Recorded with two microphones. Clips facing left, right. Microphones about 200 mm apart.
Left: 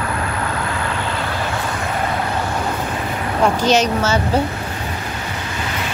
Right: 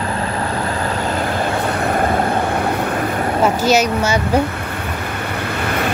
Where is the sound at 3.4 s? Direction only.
10° right (ahead or behind).